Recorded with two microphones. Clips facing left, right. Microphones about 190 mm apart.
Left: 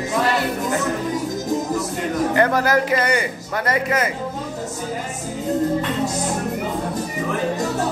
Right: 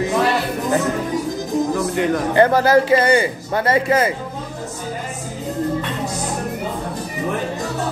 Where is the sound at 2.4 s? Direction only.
30° right (ahead or behind).